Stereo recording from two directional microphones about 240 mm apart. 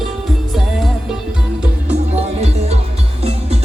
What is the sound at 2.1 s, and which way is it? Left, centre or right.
Music, right.